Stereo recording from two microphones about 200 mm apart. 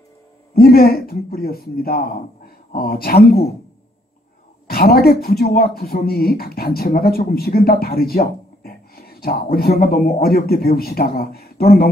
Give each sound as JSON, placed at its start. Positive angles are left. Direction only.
{"t": 0.6, "sound": "speech", "side_deg": 50}
{"t": 4.6, "sound": "speech", "side_deg": 50}